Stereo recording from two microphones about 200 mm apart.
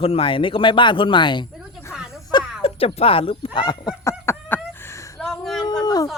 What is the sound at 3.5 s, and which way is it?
Fowl, 20° left (ahead or behind).